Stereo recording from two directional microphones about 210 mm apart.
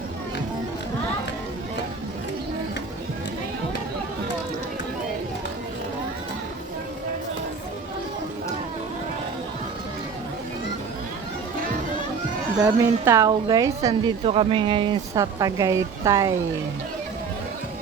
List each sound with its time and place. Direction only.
12.6 s speech: 15° right (ahead or behind)